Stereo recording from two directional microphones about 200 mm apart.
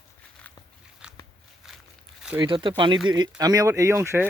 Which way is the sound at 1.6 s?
Centre (ahead or behind).